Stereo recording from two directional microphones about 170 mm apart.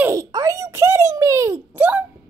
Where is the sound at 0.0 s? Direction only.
20° right (ahead or behind).